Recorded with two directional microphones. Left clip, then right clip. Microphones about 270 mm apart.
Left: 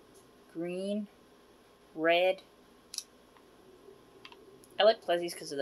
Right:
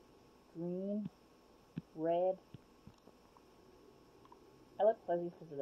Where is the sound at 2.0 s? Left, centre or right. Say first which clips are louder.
Left 8 dB; left.